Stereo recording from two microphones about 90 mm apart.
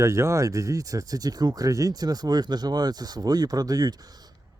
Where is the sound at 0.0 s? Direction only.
30° right (ahead or behind).